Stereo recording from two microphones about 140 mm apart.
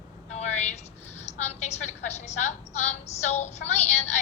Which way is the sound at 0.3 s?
55° left (ahead or behind).